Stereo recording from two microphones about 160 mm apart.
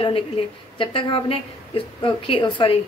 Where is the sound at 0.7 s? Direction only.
30° left (ahead or behind).